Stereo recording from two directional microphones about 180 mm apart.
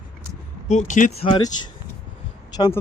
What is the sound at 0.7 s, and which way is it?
Speech, 45° left (ahead or behind).